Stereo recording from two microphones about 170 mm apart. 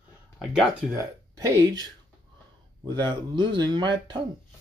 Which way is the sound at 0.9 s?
20° right (ahead or behind).